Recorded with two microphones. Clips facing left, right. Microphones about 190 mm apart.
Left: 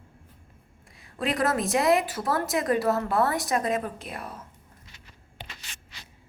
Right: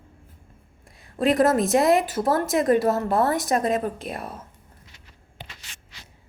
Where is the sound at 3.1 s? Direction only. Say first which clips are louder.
Right 3 dB; 45° right (ahead or behind).